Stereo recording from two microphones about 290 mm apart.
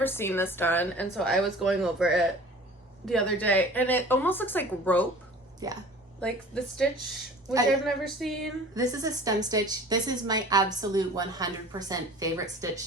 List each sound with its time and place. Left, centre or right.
0.0 s a woman's voice: centre
5.6 s a woman's voice: centre
6.1 s a woman's voice: centre
7.9 s a woman's voice: centre
8.7 s a woman's voice: centre